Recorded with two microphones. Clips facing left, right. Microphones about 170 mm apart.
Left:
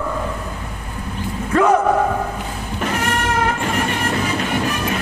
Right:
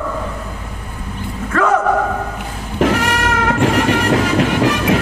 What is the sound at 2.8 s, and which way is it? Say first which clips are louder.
Music: right 6 dB; 90° right.